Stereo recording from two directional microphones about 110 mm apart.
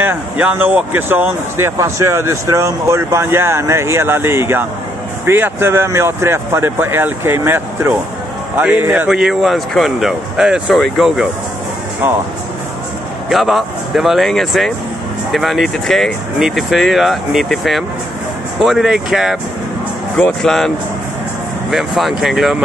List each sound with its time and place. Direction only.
0.0 s speech: 15° right (ahead or behind)
13.3 s speech: centre (ahead or behind)